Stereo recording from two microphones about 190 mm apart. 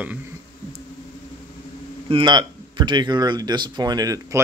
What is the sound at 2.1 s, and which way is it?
Speech, 25° right (ahead or behind).